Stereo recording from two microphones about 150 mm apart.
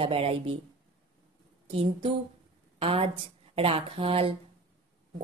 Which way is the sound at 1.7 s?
40° right (ahead or behind).